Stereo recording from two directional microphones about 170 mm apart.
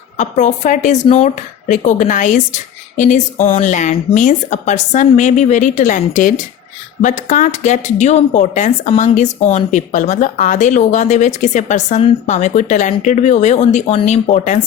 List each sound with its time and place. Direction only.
0.2 s speech: 45° left (ahead or behind)